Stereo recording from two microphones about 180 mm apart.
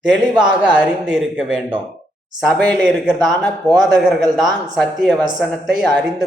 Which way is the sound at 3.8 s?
Centre (ahead or behind).